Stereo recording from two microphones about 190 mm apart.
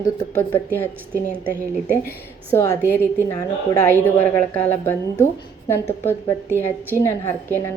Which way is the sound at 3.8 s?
10° left (ahead or behind).